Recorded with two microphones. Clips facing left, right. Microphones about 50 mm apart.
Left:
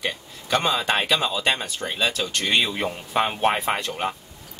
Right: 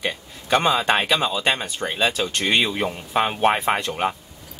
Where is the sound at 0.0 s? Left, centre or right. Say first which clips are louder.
Right 2 dB; centre.